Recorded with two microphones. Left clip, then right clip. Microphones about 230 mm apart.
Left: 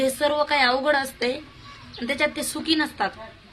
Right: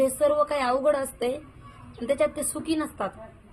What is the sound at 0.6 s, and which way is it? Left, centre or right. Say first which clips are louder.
Speech: left 3 dB; left.